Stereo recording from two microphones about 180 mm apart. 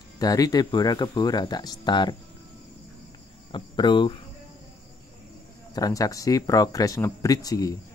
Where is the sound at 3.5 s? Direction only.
25° left (ahead or behind).